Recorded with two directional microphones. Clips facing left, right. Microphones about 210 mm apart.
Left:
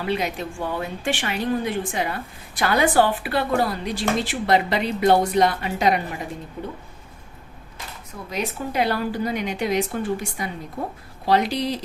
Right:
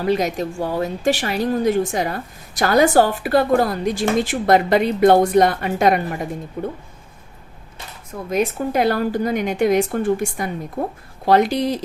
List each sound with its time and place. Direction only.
0.0 s a woman's voice: 40° right (ahead or behind)
8.3 s a woman's voice: 50° right (ahead or behind)